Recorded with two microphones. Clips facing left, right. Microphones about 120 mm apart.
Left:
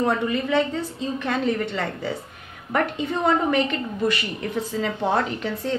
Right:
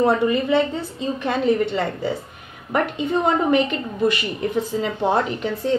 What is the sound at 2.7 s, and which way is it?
A woman's voice, 15° right (ahead or behind).